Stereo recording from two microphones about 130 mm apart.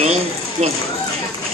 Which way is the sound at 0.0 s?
55° right (ahead or behind).